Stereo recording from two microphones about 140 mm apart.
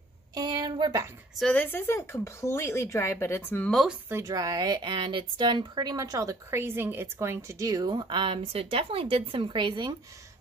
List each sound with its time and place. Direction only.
0.3 s a sound: 30° right (ahead or behind)
1.4 s speech: 10° left (ahead or behind)
4.1 s a woman's voice: 25° right (ahead or behind)